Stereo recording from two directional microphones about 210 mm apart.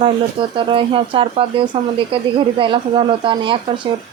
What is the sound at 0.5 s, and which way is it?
Speech, 25° right (ahead or behind).